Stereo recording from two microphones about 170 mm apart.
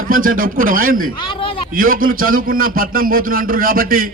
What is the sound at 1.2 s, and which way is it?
Speech, 30° left (ahead or behind).